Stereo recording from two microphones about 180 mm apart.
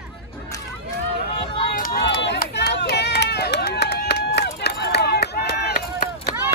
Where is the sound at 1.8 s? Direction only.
60° left (ahead or behind).